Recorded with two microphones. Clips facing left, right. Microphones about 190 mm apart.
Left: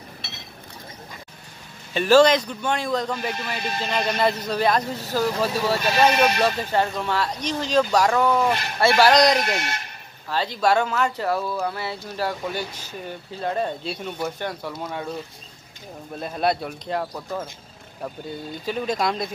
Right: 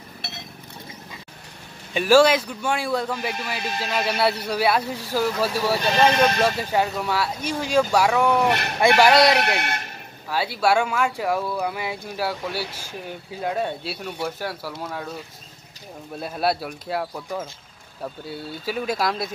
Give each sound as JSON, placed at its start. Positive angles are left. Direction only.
{"t": 2.0, "sound": "speech", "side_deg": -10}
{"t": 5.8, "sound": "speech", "side_deg": 10}
{"t": 6.4, "sound": "speech", "side_deg": -10}
{"t": 8.4, "sound": "speech", "side_deg": -65}
{"t": 8.8, "sound": "speech", "side_deg": -10}
{"t": 9.3, "sound": "speech", "side_deg": -65}
{"t": 10.3, "sound": "speech", "side_deg": -10}
{"t": 16.2, "sound": "speech", "side_deg": -5}